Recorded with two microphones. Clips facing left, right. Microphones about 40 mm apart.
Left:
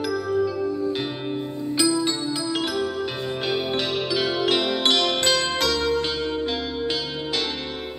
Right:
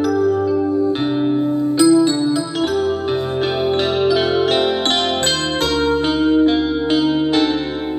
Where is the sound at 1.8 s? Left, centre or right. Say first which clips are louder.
Right 9 dB; right.